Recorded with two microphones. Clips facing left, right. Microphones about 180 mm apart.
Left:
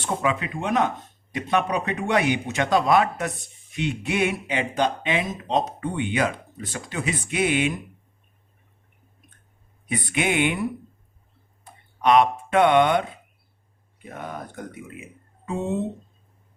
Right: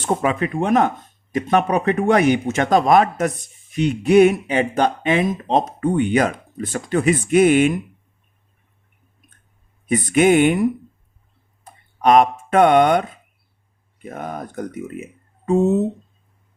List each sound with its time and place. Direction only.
0.0 s speech: 45° right (ahead or behind)
9.9 s speech: 45° right (ahead or behind)
11.6 s a sound: 45° right (ahead or behind)
14.0 s speech: 45° right (ahead or behind)